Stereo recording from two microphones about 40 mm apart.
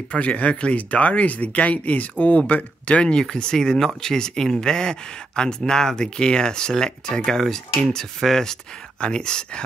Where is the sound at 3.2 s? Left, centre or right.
Centre.